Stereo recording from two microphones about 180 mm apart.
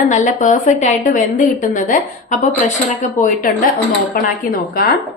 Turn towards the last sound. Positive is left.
turn(degrees=55)  # may be behind; listen again after turning